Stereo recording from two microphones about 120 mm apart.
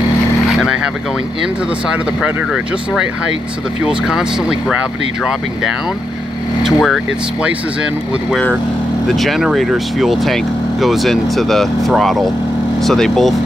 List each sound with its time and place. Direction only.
4.1 s speech: 5° right (ahead or behind)
6.6 s speech: centre (ahead or behind)
9.0 s speech: centre (ahead or behind)